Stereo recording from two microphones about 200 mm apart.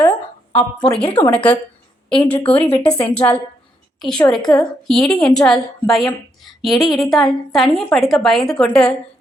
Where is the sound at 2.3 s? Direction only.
25° left (ahead or behind).